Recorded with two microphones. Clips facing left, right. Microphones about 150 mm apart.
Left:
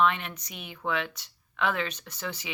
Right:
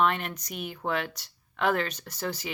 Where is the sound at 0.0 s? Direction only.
40° right (ahead or behind).